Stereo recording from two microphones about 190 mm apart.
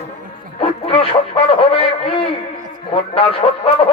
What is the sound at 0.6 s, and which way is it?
A man's voice, 30° left (ahead or behind).